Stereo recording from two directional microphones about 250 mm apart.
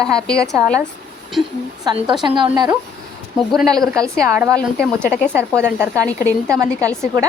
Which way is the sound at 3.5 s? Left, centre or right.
Centre.